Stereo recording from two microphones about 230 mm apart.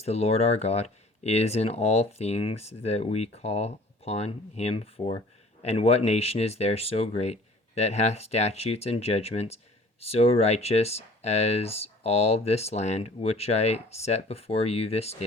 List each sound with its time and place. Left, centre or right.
0.0 s speech: left